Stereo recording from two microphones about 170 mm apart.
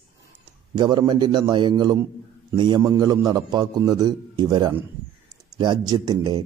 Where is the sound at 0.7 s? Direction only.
25° right (ahead or behind).